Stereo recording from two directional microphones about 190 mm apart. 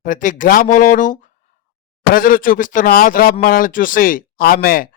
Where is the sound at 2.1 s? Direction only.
45° left (ahead or behind).